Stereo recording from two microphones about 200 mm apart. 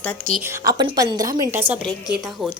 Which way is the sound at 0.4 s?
15° right (ahead or behind).